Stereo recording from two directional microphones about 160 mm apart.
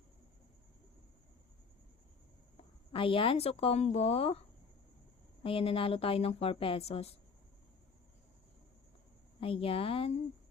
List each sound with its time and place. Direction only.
2.9 s speech: 35° left (ahead or behind)
9.4 s speech: 35° left (ahead or behind)